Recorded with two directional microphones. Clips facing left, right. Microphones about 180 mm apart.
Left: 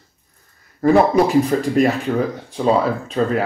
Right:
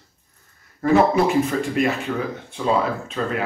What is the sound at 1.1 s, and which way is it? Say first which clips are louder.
Speech: left 4 dB; 35° left (ahead or behind).